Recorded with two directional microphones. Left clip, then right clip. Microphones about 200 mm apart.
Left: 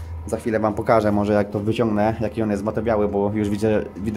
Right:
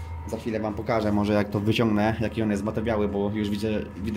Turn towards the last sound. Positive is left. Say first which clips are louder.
# left 7 dB
turn(degrees=15)  # may be behind; listen again after turning